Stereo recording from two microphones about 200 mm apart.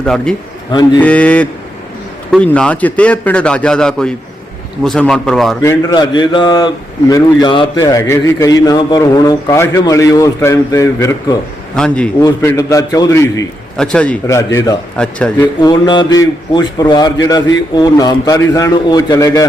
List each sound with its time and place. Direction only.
0.0 s a man's voice: 5° left (ahead or behind)
5.6 s a man's voice: 20° left (ahead or behind)
11.8 s a man's voice: 5° left (ahead or behind)
12.2 s a man's voice: 15° left (ahead or behind)
13.7 s a man's voice: 5° left (ahead or behind)
14.9 s a man's voice: 5° left (ahead or behind)
15.6 s a man's voice: 20° left (ahead or behind)